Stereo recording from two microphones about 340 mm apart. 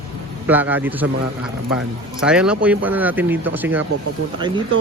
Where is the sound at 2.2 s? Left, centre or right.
Centre.